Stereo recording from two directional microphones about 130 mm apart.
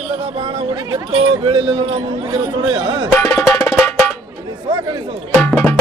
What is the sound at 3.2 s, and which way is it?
Music, 25° left (ahead or behind).